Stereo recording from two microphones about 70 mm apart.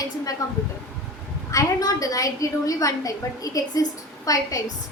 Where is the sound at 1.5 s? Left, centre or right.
Left.